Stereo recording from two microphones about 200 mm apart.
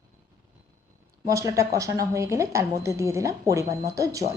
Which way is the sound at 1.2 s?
15° right (ahead or behind).